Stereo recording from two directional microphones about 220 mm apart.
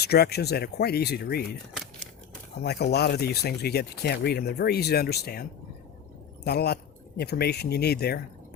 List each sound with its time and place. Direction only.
0.0 s speech: 45° left (ahead or behind)
2.6 s speech: 45° left (ahead or behind)